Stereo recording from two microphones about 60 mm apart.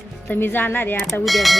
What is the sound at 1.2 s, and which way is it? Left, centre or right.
Speech, centre.